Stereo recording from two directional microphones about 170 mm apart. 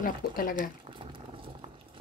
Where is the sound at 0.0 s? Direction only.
55° left (ahead or behind).